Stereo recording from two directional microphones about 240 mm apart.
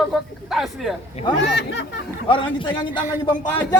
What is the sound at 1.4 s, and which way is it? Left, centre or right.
Speech, left.